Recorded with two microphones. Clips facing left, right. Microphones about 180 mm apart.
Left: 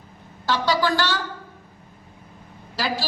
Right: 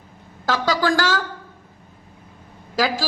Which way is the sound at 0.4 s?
45° right (ahead or behind).